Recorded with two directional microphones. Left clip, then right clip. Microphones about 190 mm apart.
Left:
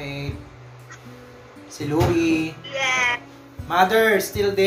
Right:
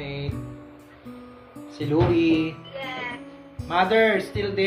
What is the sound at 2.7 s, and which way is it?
Music, 40° left (ahead or behind).